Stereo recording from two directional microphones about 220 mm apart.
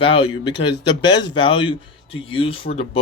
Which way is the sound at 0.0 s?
25° left (ahead or behind).